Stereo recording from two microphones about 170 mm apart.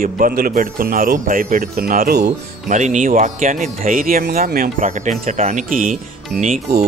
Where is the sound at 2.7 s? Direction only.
45° right (ahead or behind).